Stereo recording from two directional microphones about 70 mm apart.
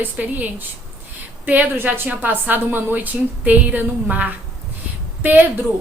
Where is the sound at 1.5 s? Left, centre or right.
Right.